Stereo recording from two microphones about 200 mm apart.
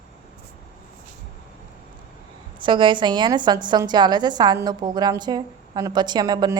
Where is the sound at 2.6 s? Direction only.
25° right (ahead or behind).